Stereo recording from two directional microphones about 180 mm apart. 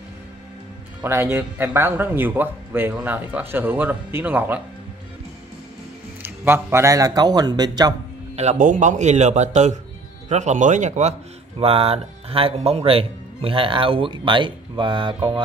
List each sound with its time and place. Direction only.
1.0 s speech: 10° right (ahead or behind)
6.2 s a man's voice: 10° right (ahead or behind)
8.4 s speech: 40° right (ahead or behind); by 15.1 s 25° right (ahead or behind)